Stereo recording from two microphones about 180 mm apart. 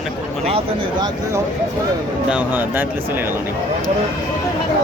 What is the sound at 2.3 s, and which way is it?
Speech, 10° right (ahead or behind).